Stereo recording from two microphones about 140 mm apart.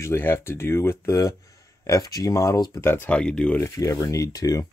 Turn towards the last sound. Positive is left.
turn(degrees=25)  # may be behind; listen again after turning